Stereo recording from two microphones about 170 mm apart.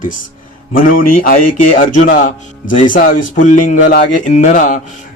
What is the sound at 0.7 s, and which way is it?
A man's voice, 55° left (ahead or behind).